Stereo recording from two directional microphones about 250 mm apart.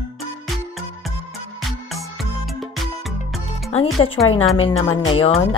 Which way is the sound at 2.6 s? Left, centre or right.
Centre.